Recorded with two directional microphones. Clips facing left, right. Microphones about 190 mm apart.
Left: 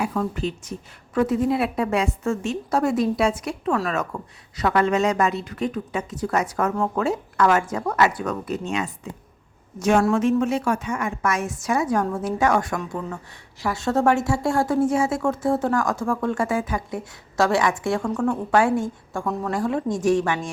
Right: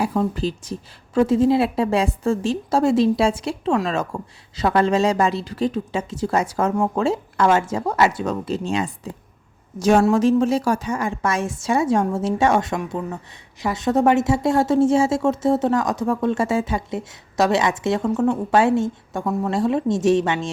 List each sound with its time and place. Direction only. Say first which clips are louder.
0.0 s speech: right 3 dB; 30° right (ahead or behind)